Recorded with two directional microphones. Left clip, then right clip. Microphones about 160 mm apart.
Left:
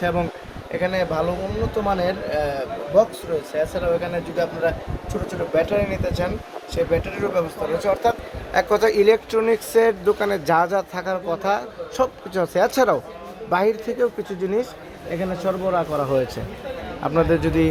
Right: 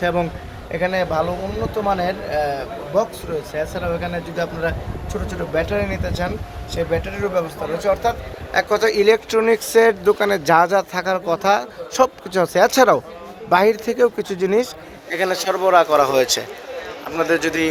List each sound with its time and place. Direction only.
0.0 s speech: 20° right (ahead or behind)
3.5 s speech: 15° right (ahead or behind); by 8.1 s centre (ahead or behind)
8.5 s speech: 15° left (ahead or behind)
9.3 s speech: 10° right (ahead or behind)
14.0 s speech: 35° right (ahead or behind)
17.2 s speech: 10° right (ahead or behind)